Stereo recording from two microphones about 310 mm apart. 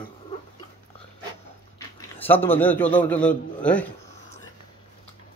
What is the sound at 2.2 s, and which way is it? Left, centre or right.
A man's voice, centre.